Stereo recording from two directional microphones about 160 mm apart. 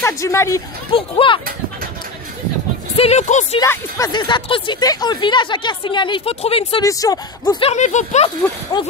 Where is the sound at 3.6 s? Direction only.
20° left (ahead or behind); by 6.8 s 35° left (ahead or behind).